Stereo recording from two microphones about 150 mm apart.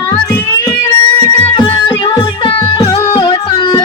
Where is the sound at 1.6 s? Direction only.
30° left (ahead or behind).